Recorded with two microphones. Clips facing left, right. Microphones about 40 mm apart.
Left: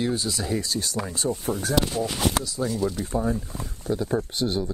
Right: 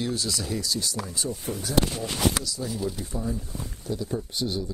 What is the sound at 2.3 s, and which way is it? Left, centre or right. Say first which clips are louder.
Speech: left 4 dB; left.